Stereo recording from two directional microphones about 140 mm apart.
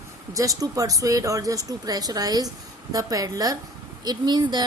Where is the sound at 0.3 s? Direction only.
25° right (ahead or behind).